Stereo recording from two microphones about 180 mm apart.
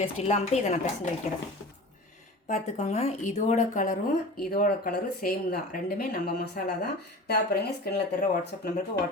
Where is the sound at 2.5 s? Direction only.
40° left (ahead or behind).